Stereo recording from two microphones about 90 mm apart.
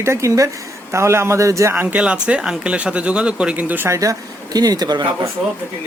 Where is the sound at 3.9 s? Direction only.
40° right (ahead or behind).